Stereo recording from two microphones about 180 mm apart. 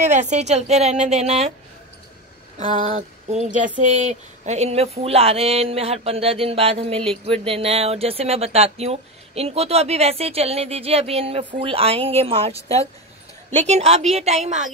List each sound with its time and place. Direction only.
0.0 s speech: 40° right (ahead or behind)
2.6 s speech: 45° right (ahead or behind)